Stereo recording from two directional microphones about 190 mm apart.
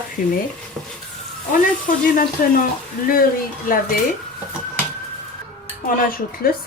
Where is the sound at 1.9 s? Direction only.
45° left (ahead or behind).